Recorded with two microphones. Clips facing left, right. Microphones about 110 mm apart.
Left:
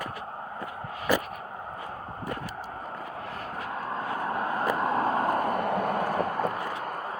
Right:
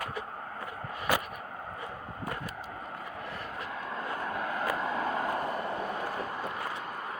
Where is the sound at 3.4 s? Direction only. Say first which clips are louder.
Left 4 dB; 40° left (ahead or behind).